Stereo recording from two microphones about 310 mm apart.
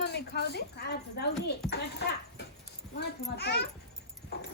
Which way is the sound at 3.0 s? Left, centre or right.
Left.